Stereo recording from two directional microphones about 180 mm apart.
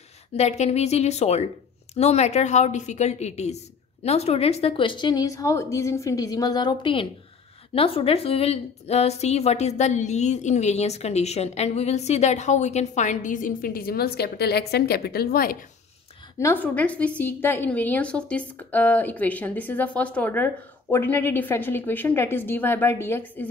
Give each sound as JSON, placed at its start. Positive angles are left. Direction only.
{"t": 0.4, "sound": "a woman's voice", "side_deg": 35}
{"t": 16.3, "sound": "a woman's voice", "side_deg": 10}